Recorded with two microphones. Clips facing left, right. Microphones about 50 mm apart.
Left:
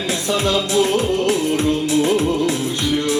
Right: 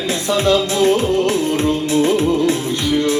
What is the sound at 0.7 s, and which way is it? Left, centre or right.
Music, right.